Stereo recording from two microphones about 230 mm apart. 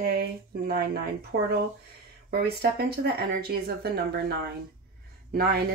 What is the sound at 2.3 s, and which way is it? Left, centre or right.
Speech, right.